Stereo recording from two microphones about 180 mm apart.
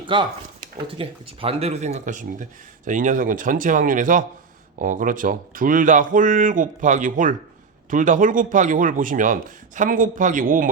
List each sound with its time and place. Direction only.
0.1 s speech: 25° right (ahead or behind); by 10.7 s 50° right (ahead or behind)